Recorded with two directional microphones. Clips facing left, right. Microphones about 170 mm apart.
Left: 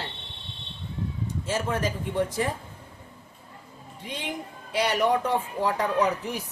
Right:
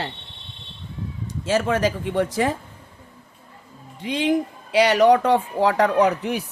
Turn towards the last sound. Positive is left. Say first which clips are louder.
# right 6 dB
turn(degrees=-75)  # may be behind; listen again after turning